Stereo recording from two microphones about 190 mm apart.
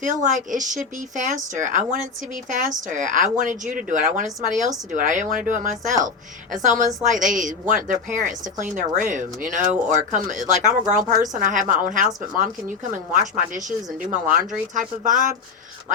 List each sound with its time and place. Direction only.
0.0 s speech: 40° right (ahead or behind)